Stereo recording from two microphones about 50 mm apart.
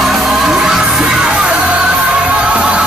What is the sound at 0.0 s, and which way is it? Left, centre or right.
Music, centre.